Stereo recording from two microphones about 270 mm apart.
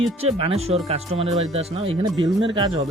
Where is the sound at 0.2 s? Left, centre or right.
Right.